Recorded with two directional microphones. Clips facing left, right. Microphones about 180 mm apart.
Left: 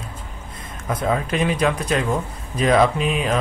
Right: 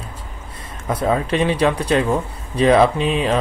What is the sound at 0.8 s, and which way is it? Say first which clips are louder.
Speech: right 3 dB; 35° right (ahead or behind).